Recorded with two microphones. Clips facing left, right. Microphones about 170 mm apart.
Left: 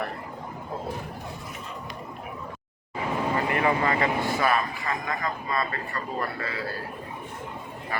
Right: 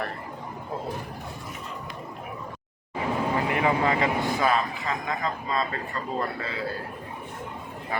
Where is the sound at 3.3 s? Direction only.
10° right (ahead or behind).